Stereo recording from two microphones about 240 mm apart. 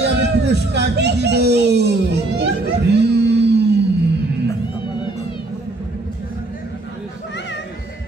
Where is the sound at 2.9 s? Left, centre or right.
Right.